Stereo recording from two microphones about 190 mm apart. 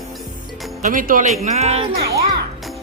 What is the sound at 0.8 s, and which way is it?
Speech, 45° right (ahead or behind).